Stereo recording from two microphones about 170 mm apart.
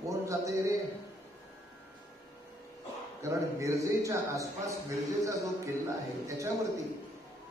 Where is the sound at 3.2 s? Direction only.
20° right (ahead or behind).